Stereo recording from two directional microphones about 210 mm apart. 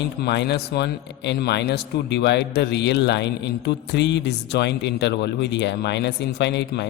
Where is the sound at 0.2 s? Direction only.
50° left (ahead or behind).